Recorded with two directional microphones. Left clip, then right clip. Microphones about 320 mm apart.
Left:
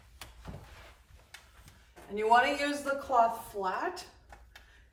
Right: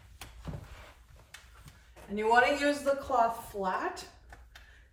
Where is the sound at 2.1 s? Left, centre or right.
Centre.